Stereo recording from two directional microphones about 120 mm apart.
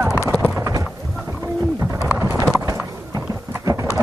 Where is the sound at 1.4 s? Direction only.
20° right (ahead or behind).